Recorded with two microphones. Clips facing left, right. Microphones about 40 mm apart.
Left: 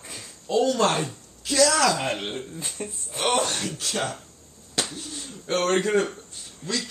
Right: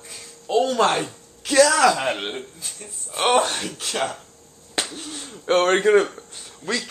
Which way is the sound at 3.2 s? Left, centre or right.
Right.